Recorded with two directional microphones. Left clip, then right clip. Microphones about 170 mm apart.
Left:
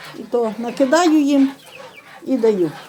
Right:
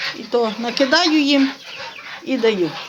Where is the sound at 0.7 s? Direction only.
35° left (ahead or behind).